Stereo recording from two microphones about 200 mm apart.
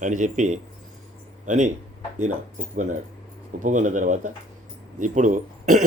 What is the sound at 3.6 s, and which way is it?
Speech, 40° right (ahead or behind).